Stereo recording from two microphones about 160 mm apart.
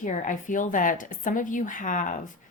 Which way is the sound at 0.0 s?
55° left (ahead or behind).